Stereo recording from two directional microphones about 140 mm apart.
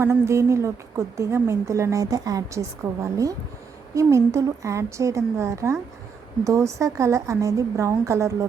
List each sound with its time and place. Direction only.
0.0 s a woman's voice: 20° right (ahead or behind)